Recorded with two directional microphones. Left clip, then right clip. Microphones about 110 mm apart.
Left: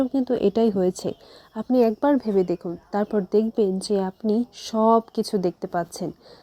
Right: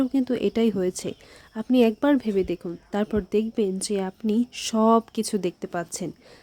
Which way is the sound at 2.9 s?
Centre (ahead or behind).